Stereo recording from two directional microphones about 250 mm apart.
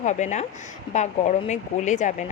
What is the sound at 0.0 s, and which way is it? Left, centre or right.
Speech, left.